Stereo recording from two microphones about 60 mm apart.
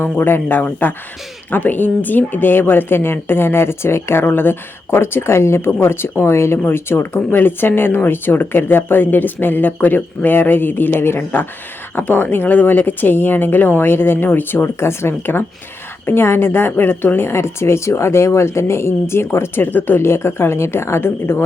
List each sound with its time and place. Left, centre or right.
0.0 s speech: left